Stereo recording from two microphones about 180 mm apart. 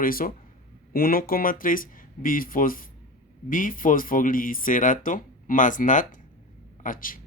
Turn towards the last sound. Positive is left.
turn(degrees=50)  # may be behind; listen again after turning